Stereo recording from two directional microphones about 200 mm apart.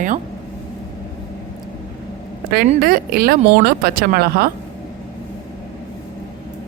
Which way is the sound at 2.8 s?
50° right (ahead or behind).